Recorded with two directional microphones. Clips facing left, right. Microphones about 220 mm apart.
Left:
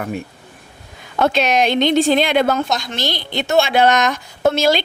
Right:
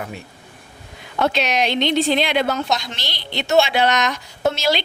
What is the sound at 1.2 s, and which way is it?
A woman's voice, 50° left (ahead or behind).